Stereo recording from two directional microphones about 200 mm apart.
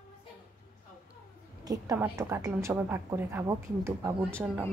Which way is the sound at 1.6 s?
15° right (ahead or behind).